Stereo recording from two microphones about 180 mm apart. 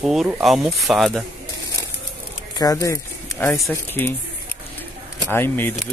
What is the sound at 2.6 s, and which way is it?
Speech, 20° left (ahead or behind).